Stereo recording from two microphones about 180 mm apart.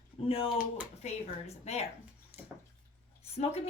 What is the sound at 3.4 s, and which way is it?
Speech, 40° left (ahead or behind).